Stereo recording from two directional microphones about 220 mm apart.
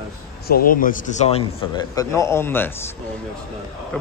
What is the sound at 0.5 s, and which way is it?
A man's voice, 40° left (ahead or behind).